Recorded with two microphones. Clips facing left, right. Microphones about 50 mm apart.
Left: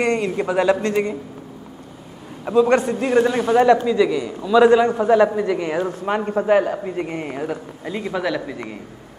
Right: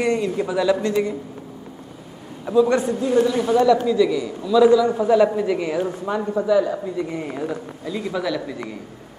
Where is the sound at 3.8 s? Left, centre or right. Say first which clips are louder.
Even; left.